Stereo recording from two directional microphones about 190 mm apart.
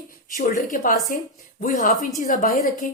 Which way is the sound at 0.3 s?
40° left (ahead or behind).